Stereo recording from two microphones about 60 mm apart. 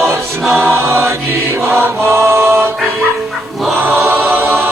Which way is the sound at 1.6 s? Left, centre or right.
Right.